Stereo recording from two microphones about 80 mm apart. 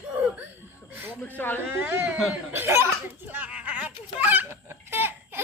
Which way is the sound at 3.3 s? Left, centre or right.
Centre.